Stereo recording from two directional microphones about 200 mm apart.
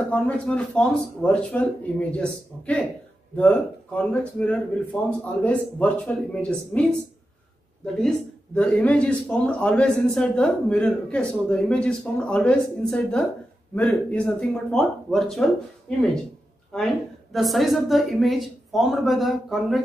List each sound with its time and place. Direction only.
0.1 s a man's voice: 5° left (ahead or behind)
8.5 s a man's voice: 5° left (ahead or behind)